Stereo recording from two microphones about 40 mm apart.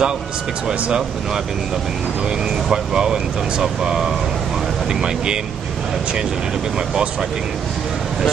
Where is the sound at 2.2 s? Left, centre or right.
Right.